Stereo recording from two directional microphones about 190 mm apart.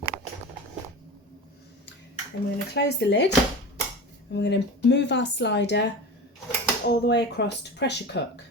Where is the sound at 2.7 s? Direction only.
65° left (ahead or behind).